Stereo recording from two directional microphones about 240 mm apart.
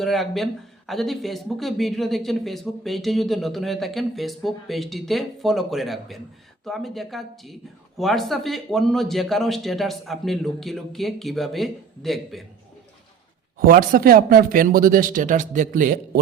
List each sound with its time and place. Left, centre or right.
0.0 s speech: centre
13.7 s speech: right